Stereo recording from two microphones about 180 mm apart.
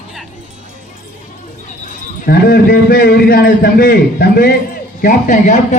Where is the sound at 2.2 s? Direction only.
55° left (ahead or behind).